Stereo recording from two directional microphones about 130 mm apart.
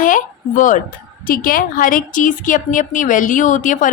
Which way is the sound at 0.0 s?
90° left.